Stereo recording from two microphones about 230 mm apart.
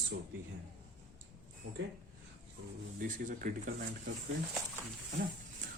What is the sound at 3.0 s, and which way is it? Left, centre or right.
Speech, right.